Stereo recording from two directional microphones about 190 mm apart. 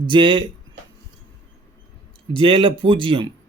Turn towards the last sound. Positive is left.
turn(degrees=-25)  # may be behind; listen again after turning